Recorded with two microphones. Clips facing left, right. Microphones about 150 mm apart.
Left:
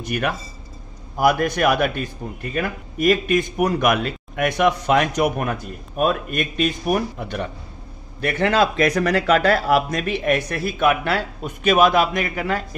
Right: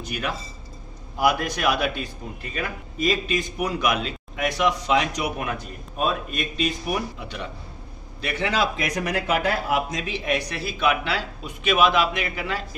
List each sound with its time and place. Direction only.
0.0 s a man's voice: 55° left (ahead or behind)